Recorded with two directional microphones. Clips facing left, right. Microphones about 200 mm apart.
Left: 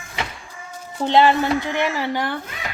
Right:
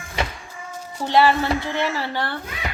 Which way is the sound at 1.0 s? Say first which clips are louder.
Left 2 dB; 20° left (ahead or behind).